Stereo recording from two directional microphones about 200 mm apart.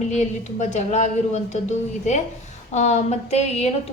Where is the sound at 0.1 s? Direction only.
35° left (ahead or behind).